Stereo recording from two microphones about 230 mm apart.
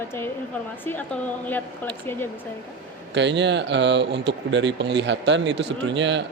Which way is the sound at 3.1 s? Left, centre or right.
Right.